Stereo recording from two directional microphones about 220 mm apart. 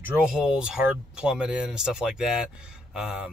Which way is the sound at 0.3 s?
5° right (ahead or behind).